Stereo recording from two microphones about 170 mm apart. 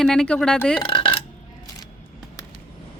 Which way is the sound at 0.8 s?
30° left (ahead or behind).